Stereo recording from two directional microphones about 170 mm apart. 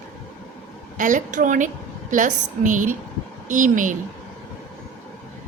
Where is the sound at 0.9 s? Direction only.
50° right (ahead or behind).